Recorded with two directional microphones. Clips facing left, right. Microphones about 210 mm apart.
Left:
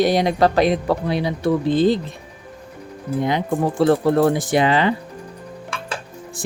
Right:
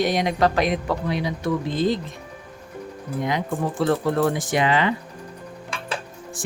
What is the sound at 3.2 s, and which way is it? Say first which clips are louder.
Speech: left 4 dB; 30° left (ahead or behind).